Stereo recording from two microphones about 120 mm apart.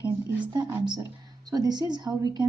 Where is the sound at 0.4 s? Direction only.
35° right (ahead or behind).